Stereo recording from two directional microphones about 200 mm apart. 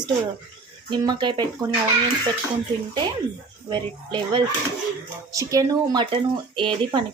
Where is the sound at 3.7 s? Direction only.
25° right (ahead or behind).